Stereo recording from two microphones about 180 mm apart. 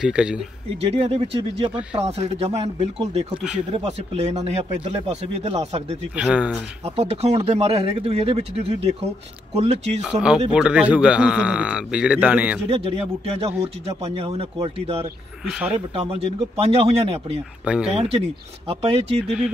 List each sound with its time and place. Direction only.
0.0 s speech: 5° right (ahead or behind)
0.7 s speech: 35° right (ahead or behind)
6.1 s speech: 5° right (ahead or behind)
6.8 s speech: 35° right (ahead or behind)
10.5 s speech: 5° right (ahead or behind)
12.6 s speech: 35° right (ahead or behind)
17.6 s speech: 5° right (ahead or behind)
17.9 s speech: 35° right (ahead or behind)
19.2 s speech: 5° right (ahead or behind)